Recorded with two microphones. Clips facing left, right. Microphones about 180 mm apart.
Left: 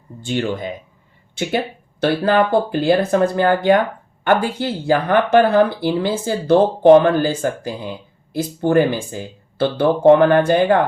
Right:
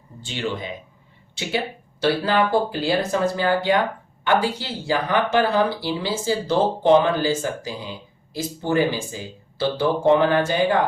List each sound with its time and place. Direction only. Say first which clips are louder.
0.2 s speech: left 6 dB; 50° left (ahead or behind)